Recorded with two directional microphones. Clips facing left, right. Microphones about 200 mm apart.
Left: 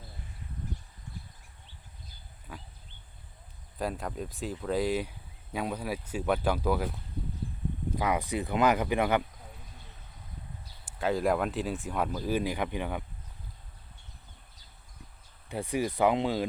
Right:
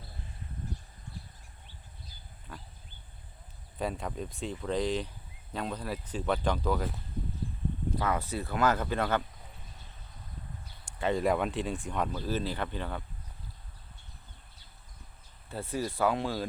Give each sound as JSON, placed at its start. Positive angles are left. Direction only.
{"t": 2.5, "sound": "a sound", "side_deg": 10}
{"t": 3.8, "sound": "speech", "side_deg": 0}
{"t": 10.8, "sound": "speech", "side_deg": 0}
{"t": 15.4, "sound": "speech", "side_deg": 15}